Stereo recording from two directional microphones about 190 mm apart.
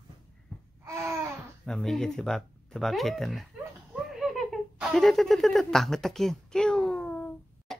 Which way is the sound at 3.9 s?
Centre (ahead or behind).